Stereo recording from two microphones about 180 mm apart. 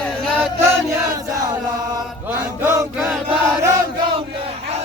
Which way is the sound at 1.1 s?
20° right (ahead or behind).